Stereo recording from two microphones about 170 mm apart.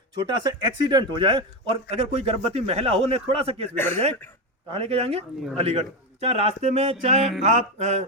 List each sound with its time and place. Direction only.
0.2 s a man's voice: 25° right (ahead or behind)
3.8 s speech: 10° left (ahead or behind)
4.7 s a man's voice: 35° right (ahead or behind)